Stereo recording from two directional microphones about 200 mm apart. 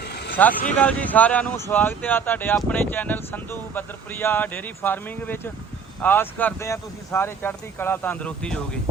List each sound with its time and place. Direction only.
0.0 s vehicle: 55° left (ahead or behind)
0.8 s speech: 5° left (ahead or behind)